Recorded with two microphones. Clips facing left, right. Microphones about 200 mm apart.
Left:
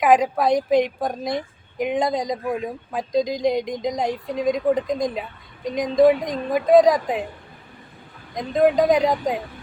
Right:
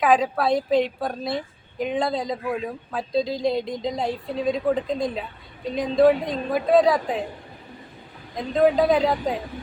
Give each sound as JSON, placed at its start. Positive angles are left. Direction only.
{"t": 0.0, "sound": "a woman's voice", "side_deg": 15}
{"t": 8.4, "sound": "a woman's voice", "side_deg": 15}